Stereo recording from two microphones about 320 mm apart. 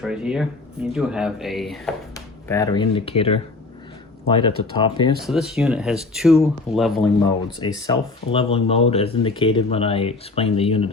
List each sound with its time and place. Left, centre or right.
0.0 s speech: centre
5.2 s speech: centre
7.2 s speech: centre